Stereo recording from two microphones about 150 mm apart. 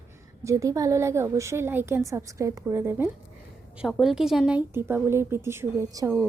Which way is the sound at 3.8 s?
Centre (ahead or behind).